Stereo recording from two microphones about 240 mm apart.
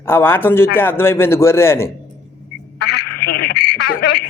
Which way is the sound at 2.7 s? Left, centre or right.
Left.